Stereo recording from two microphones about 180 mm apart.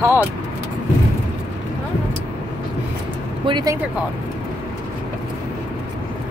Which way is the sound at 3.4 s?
25° right (ahead or behind).